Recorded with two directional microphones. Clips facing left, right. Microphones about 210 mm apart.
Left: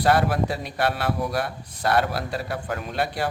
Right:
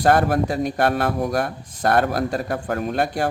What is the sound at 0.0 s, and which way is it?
A man's voice, 50° right (ahead or behind).